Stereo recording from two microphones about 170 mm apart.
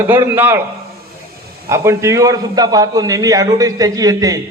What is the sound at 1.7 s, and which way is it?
A man's voice, 15° right (ahead or behind).